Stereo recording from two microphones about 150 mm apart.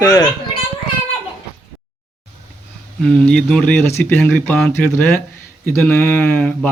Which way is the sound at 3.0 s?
5° left (ahead or behind).